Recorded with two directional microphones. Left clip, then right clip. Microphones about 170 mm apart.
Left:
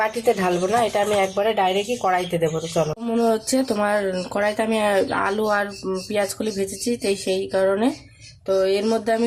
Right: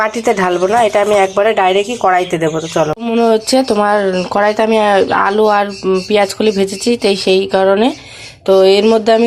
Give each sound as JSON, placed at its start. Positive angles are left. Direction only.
{"t": 0.0, "sound": "a woman's voice", "side_deg": -10}